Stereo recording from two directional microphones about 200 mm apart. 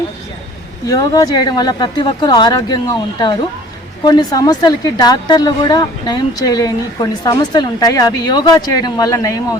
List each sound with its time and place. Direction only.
0.9 s a woman's voice: 20° left (ahead or behind)